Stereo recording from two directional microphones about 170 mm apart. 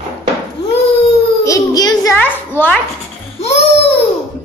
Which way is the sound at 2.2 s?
10° left (ahead or behind).